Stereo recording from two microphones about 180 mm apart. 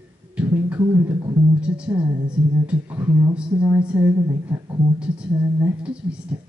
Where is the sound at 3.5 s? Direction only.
25° right (ahead or behind).